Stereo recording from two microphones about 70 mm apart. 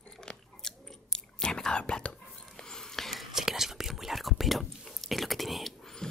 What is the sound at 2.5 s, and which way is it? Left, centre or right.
Whispering, centre.